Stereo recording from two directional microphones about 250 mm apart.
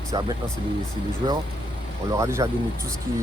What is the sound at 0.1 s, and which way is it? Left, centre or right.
Speech, centre.